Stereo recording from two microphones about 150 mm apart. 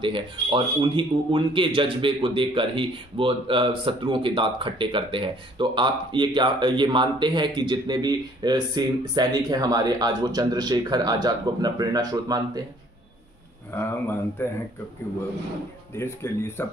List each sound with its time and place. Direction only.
0.0 s speech: 35° right (ahead or behind)
13.7 s speech: 15° left (ahead or behind)
16.0 s speech: 15° left (ahead or behind)